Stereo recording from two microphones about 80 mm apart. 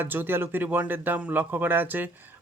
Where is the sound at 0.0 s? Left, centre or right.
Right.